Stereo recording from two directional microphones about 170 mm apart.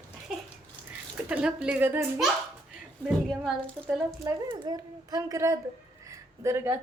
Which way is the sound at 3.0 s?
5° right (ahead or behind).